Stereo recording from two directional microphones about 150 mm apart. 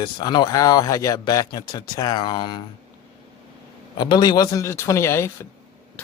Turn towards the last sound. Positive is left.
turn(degrees=15)  # may be behind; listen again after turning